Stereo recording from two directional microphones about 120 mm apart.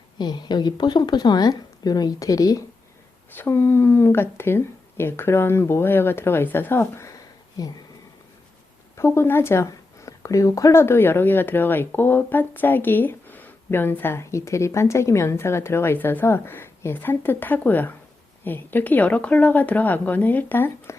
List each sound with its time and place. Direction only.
0.2 s speech: 35° left (ahead or behind)
3.3 s speech: 20° left (ahead or behind)
9.0 s speech: 20° left (ahead or behind)